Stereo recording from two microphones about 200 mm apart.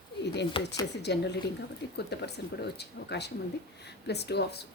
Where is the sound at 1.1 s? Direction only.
55° left (ahead or behind).